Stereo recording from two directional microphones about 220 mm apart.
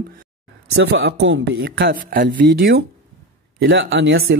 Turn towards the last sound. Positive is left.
turn(degrees=-55)  # may be behind; listen again after turning